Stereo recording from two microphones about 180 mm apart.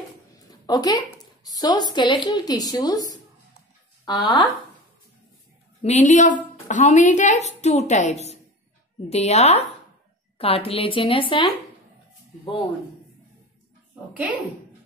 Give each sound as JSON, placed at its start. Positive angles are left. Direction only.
{"t": 0.5, "sound": "a woman's voice", "side_deg": 20}
{"t": 5.8, "sound": "a woman's voice", "side_deg": 40}